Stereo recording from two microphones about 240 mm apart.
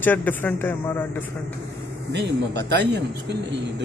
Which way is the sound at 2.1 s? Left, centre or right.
Right.